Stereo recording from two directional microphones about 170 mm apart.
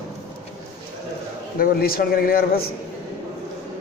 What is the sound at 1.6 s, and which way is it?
A man's voice, 60° left (ahead or behind).